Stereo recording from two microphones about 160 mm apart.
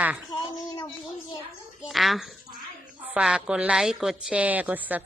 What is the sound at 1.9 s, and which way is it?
A woman's voice, centre (ahead or behind).